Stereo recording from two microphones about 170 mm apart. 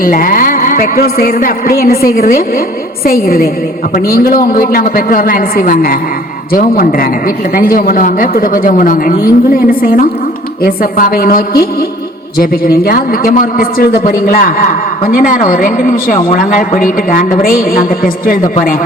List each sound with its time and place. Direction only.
0.0 s a man's voice: 55° left (ahead or behind)